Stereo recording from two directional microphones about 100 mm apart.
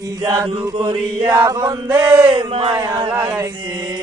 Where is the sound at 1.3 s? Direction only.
40° right (ahead or behind).